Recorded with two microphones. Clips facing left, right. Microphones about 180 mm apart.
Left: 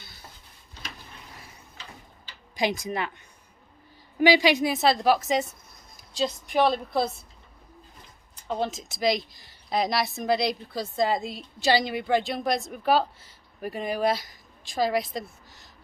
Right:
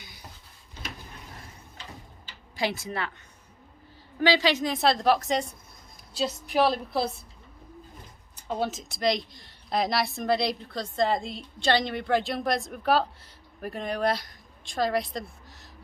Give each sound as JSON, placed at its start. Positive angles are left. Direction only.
{"t": 0.0, "sound": "a sound", "side_deg": -15}
{"t": 2.6, "sound": "speech", "side_deg": 15}
{"t": 4.2, "sound": "a woman's voice", "side_deg": 10}
{"t": 8.4, "sound": "a woman's voice", "side_deg": -5}